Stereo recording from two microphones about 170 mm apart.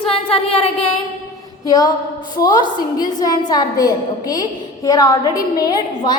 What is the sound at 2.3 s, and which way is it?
A woman's voice, 25° left (ahead or behind).